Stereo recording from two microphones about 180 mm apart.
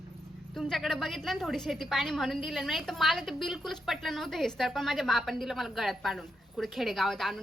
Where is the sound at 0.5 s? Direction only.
Centre (ahead or behind).